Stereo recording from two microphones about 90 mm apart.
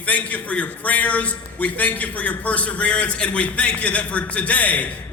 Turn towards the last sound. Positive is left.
turn(degrees=15)  # may be behind; listen again after turning